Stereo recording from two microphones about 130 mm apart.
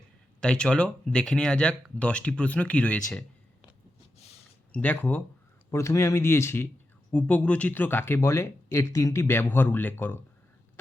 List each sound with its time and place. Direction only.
0.4 s speech: 5° left (ahead or behind)
4.7 s speech: 10° left (ahead or behind)
5.7 s speech: 20° left (ahead or behind)